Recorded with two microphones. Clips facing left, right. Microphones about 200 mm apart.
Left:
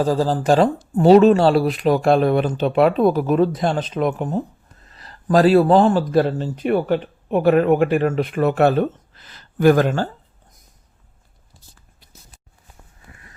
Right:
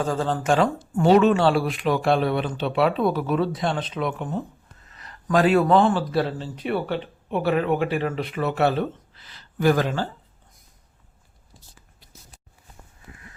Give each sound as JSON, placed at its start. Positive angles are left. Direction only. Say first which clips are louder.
{"t": 0.0, "sound": "speech", "louder": "left 6 dB", "side_deg": 35}